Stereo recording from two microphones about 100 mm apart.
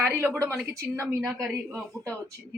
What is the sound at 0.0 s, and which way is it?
Speech, 15° right (ahead or behind).